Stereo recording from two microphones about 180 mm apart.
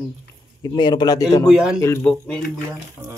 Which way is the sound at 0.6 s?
25° left (ahead or behind).